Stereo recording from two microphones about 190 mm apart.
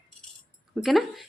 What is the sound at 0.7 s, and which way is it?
Speech, centre (ahead or behind).